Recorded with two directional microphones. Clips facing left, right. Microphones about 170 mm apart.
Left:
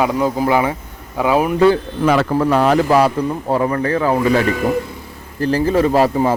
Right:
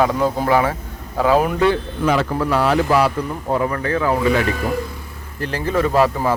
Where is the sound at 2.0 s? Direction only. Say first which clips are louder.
Left 3 dB; 60° left (ahead or behind).